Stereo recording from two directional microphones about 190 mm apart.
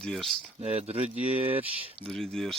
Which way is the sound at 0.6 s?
30° right (ahead or behind).